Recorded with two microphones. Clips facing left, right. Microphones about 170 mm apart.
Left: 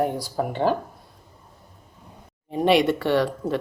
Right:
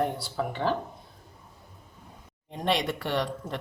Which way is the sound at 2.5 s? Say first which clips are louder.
Left 9 dB; 5° left (ahead or behind).